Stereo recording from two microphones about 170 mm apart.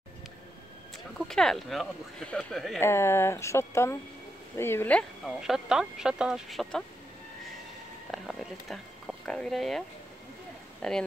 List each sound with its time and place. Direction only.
0.9 s speech: centre (ahead or behind)
2.8 s speech: 15° left (ahead or behind)
5.2 s speech: 5° right (ahead or behind)
8.1 s speech: centre (ahead or behind)